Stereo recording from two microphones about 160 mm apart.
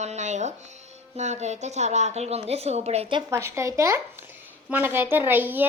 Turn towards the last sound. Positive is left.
turn(degrees=-10)  # may be behind; listen again after turning